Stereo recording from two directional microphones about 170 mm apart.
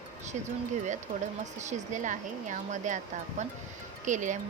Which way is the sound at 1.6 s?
45° right (ahead or behind).